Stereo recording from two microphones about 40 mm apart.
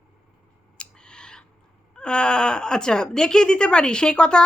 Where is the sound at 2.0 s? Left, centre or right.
Left.